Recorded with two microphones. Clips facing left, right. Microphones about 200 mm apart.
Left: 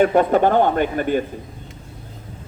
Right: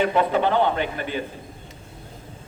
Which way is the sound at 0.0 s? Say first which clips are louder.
Left 5 dB; 50° left (ahead or behind).